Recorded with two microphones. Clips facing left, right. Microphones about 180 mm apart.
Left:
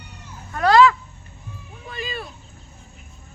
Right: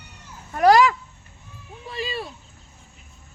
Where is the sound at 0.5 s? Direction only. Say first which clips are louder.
Left 1 dB; 15° right (ahead or behind).